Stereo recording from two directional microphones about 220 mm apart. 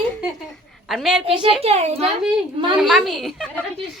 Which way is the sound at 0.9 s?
Centre (ahead or behind).